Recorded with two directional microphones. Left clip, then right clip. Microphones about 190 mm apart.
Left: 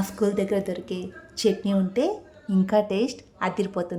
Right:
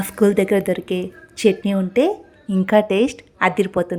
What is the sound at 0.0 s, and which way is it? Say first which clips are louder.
A woman's voice: right 8 dB; 25° right (ahead or behind).